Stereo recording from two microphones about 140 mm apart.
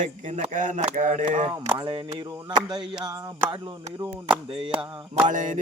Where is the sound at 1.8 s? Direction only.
30° right (ahead or behind).